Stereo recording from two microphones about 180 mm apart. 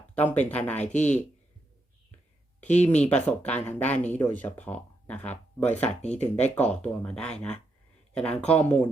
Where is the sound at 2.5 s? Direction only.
10° left (ahead or behind).